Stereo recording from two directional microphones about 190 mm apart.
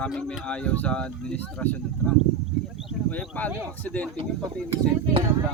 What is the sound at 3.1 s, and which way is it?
Speech, 5° left (ahead or behind).